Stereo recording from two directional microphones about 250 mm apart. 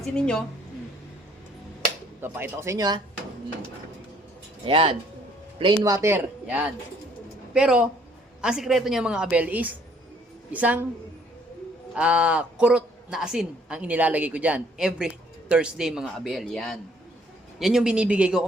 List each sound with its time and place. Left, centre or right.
0.0 s a woman's voice: centre
2.2 s a man's voice: centre
4.6 s a man's voice: right; by 10.8 s centre
11.9 s a woman's voice: centre